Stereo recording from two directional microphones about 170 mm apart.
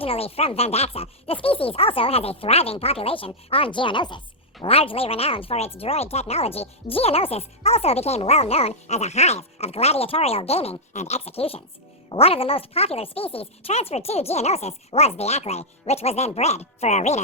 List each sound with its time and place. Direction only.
0.0 s speech: 35° left (ahead or behind)